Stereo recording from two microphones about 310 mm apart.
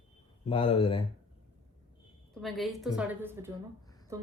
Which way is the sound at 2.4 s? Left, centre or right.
Centre.